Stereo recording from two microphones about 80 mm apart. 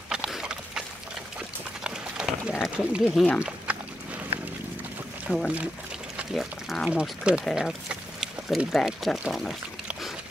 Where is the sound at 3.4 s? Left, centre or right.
Centre.